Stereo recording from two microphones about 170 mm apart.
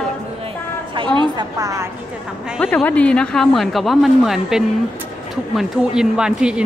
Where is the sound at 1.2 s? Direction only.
25° right (ahead or behind).